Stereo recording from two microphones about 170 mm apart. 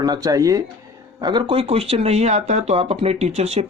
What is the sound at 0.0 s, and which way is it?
Speech, 20° right (ahead or behind).